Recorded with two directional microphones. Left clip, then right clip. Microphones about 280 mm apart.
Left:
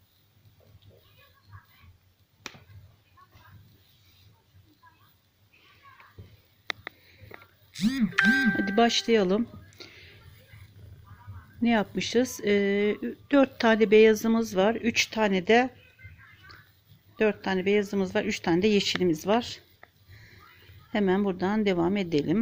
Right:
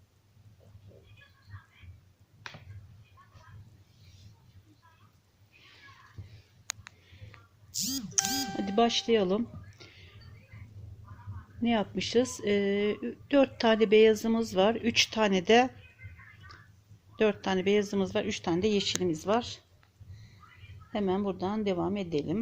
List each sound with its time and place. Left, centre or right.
8.5 s speech: centre
11.6 s speech: centre
17.2 s a man's voice: centre
20.9 s a man's voice: left